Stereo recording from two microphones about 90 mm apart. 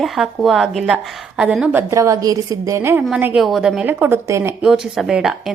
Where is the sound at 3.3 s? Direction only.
5° right (ahead or behind).